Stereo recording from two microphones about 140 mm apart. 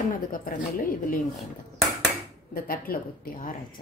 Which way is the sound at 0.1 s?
80° left.